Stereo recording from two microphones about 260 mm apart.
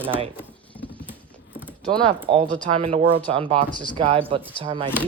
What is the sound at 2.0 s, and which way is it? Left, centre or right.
Speech, right.